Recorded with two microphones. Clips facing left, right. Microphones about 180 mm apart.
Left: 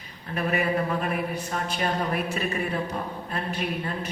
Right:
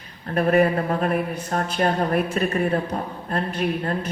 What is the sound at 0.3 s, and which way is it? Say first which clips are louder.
A man's voice: right 7 dB; 50° right (ahead or behind).